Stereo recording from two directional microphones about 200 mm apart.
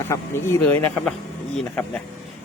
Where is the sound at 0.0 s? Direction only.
10° left (ahead or behind).